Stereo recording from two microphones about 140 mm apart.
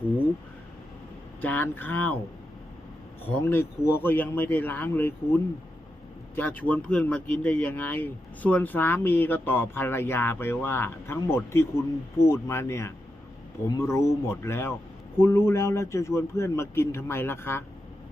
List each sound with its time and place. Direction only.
1.4 s speech: 15° left (ahead or behind)
3.2 s speech: 15° left (ahead or behind)